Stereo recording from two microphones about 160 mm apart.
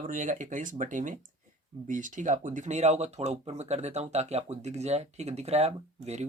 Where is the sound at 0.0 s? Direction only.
55° right (ahead or behind).